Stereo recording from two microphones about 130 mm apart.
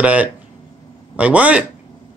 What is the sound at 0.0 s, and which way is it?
Speech, 10° right (ahead or behind).